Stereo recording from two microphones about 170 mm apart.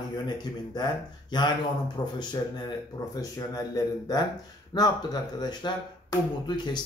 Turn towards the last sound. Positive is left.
turn(degrees=25)  # may be behind; listen again after turning